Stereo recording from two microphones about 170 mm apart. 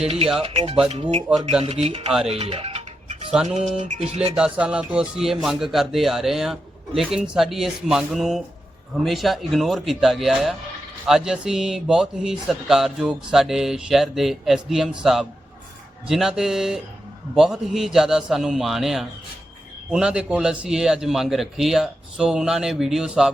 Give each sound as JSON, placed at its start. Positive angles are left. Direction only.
{"t": 0.4, "sound": "music", "side_deg": -35}
{"t": 4.4, "sound": "a man's voice", "side_deg": -5}